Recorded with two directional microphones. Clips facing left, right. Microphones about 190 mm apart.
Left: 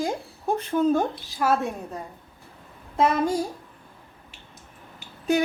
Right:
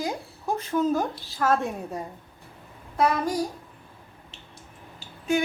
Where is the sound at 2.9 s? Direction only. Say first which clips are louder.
Left 2 dB; 25° left (ahead or behind).